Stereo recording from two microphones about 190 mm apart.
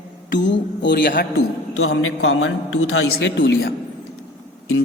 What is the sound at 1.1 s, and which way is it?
Speech, 55° left (ahead or behind).